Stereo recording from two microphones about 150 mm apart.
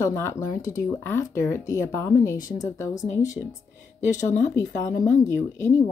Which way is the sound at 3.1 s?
55° left (ahead or behind).